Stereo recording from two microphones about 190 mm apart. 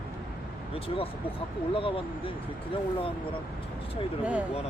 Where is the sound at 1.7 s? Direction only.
30° left (ahead or behind).